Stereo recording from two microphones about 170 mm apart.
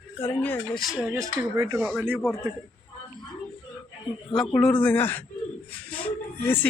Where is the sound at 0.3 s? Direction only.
10° left (ahead or behind).